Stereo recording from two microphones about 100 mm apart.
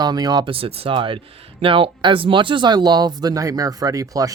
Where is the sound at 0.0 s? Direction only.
45° right (ahead or behind).